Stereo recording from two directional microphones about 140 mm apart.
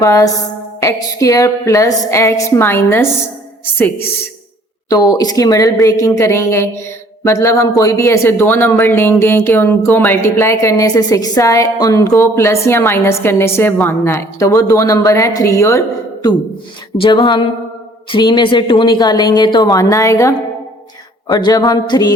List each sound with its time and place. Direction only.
0.0 s speech: 20° left (ahead or behind)
4.9 s speech: 25° left (ahead or behind)
17.0 s speech: 35° left (ahead or behind)
21.3 s speech: 30° left (ahead or behind)